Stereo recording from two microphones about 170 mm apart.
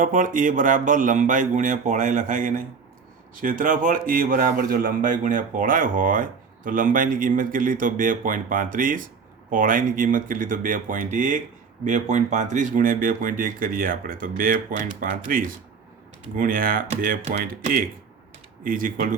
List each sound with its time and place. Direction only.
0.0 s a man's voice: 50° right (ahead or behind)